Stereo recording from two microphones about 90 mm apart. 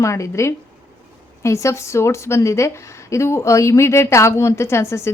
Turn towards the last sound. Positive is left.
turn(degrees=30)  # may be behind; listen again after turning